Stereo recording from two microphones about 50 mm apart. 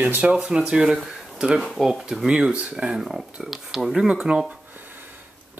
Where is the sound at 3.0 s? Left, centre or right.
Centre.